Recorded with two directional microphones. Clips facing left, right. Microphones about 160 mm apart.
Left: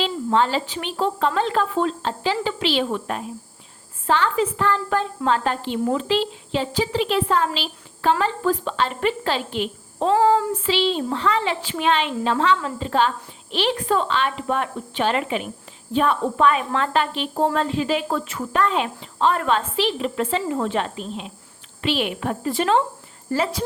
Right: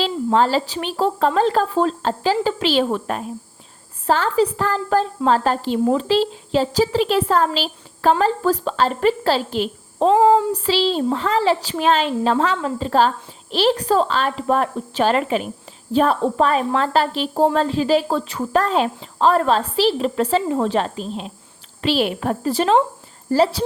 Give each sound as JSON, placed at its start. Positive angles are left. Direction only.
{"t": 0.0, "sound": "a woman's voice", "side_deg": -40}